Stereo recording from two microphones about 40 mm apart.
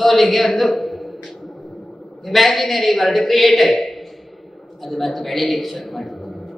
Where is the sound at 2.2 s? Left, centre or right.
Centre.